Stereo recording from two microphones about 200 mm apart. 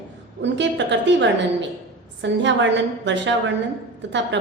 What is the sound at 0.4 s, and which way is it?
A woman's voice, 65° right (ahead or behind).